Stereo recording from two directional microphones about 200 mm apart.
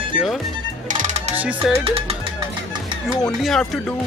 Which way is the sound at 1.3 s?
5° right (ahead or behind).